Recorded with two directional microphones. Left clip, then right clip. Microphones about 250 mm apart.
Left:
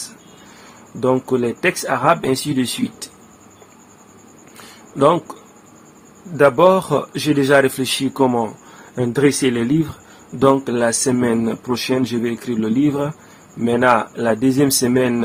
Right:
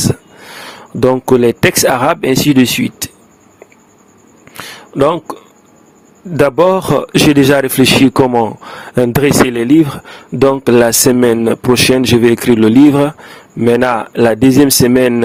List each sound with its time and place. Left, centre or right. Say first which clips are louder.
0.9 s speech: right 8 dB; right
4.5 s a sound: right 10 dB; right
6.3 s speech: right 3 dB; right